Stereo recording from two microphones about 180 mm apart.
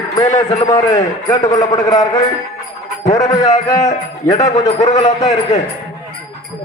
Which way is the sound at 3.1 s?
20° left (ahead or behind).